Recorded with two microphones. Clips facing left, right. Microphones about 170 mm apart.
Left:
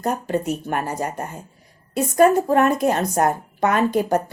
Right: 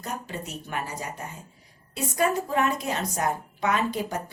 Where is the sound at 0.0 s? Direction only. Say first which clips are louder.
Left 12 dB; 50° left (ahead or behind).